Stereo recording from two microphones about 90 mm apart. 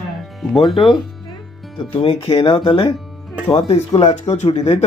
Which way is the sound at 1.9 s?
75° left (ahead or behind).